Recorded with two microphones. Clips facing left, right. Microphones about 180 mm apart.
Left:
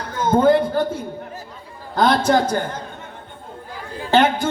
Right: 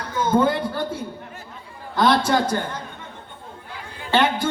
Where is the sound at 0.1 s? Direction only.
45° left (ahead or behind).